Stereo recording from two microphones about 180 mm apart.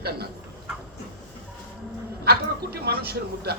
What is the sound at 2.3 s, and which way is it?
Speech, 60° right (ahead or behind).